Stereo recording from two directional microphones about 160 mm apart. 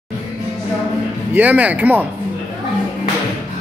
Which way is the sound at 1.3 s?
10° right (ahead or behind).